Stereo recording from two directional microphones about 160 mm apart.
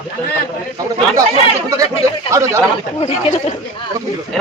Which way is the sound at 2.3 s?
15° right (ahead or behind).